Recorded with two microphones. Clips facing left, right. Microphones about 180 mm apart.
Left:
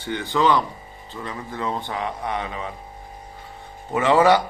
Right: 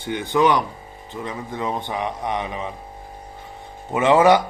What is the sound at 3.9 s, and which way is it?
Speech, 20° right (ahead or behind).